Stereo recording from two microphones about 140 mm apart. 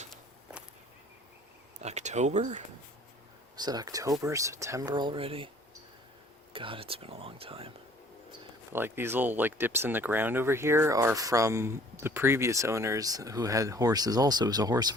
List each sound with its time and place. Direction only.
1.8 s speech: 55° right (ahead or behind)
3.5 s speech: 30° right (ahead or behind)
6.5 s speech: 40° right (ahead or behind)
8.7 s speech: 15° right (ahead or behind)